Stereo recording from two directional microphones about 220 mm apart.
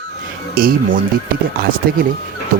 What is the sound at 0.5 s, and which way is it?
Speech, 40° right (ahead or behind).